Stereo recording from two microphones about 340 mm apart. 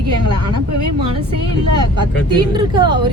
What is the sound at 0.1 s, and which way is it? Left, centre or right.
Speech, right.